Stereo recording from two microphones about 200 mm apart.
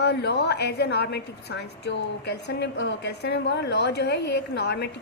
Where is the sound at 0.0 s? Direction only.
60° left (ahead or behind).